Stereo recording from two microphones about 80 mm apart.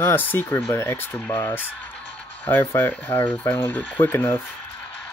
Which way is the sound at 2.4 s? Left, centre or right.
Left.